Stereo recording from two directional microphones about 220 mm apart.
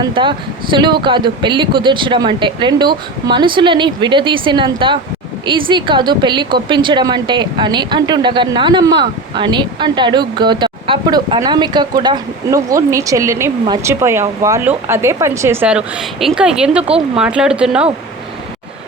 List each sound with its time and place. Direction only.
0.0 s speech: 20° right (ahead or behind); by 17.8 s 5° right (ahead or behind)